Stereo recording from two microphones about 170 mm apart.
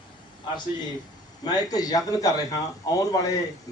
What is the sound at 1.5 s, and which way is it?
A man's voice, 20° left (ahead or behind).